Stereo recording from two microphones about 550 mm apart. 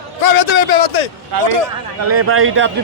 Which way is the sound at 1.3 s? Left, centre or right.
Right.